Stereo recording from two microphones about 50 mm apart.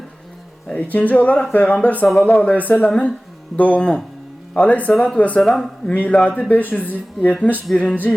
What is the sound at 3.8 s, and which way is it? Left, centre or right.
Speech, left.